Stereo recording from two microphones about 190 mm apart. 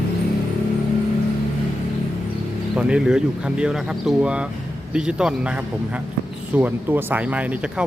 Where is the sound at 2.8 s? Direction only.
5° right (ahead or behind).